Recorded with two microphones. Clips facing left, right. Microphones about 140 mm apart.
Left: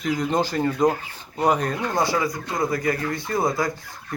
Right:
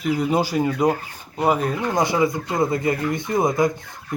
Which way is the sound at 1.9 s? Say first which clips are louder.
Right 4 dB; 20° right (ahead or behind).